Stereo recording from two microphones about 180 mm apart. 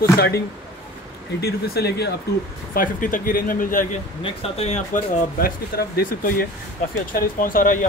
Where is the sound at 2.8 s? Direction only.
50° left (ahead or behind).